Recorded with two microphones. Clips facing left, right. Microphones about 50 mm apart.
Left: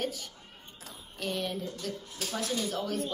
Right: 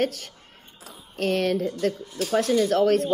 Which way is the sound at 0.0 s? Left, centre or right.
Right.